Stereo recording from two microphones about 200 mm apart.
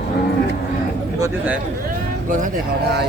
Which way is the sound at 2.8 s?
55° right (ahead or behind).